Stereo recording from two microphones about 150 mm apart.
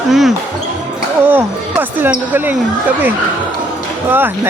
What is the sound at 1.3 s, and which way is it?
Speech, 10° right (ahead or behind).